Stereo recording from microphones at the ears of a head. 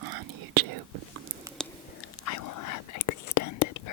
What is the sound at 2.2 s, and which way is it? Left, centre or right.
Whispering, left.